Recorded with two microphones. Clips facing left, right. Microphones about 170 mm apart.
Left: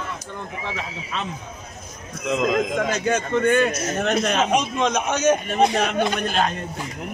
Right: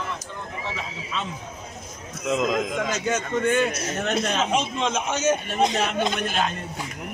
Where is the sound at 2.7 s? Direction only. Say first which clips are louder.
Left 3 dB; 55° left (ahead or behind).